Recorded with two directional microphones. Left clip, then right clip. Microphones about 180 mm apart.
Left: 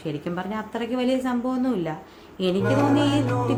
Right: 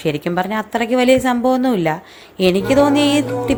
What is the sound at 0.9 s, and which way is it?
Music, 40° right (ahead or behind).